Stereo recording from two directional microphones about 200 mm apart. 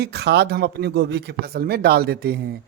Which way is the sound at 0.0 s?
55° right (ahead or behind).